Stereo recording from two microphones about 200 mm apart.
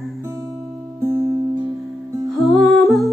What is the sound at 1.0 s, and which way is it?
Music, 15° right (ahead or behind).